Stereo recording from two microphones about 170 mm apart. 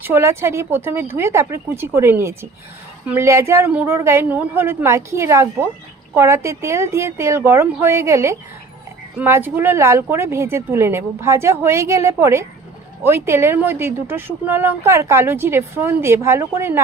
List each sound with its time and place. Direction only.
0.0 s speech: 15° right (ahead or behind)